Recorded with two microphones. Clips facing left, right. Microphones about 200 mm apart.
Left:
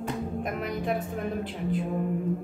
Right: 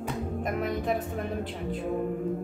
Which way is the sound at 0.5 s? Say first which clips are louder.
Right 3 dB; centre (ahead or behind).